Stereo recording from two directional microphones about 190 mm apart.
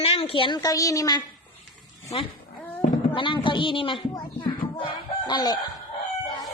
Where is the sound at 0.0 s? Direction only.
30° left (ahead or behind).